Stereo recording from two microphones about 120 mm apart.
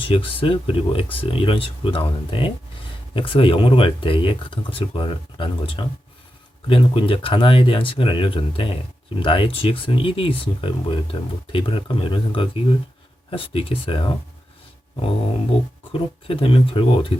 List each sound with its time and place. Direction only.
0.0 s speech: 50° left (ahead or behind)
15.9 s speech: 50° left (ahead or behind)